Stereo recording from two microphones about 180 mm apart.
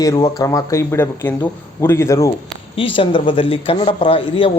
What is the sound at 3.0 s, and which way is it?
A man's voice, 30° left (ahead or behind).